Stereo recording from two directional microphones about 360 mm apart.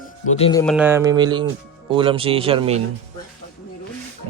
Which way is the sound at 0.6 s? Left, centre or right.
Centre.